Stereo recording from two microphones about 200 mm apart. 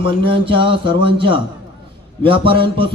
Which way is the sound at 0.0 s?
25° right (ahead or behind).